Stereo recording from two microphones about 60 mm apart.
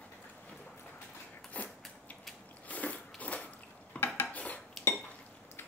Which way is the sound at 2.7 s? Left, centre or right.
Left.